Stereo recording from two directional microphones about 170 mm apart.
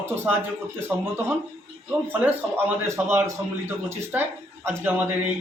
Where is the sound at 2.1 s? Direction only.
10° right (ahead or behind).